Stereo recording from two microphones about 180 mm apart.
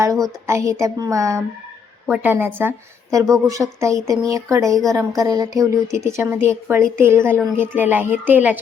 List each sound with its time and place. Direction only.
0.4 s a woman's voice: 15° right (ahead or behind)